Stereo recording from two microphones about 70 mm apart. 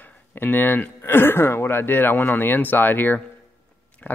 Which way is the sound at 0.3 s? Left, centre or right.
Left.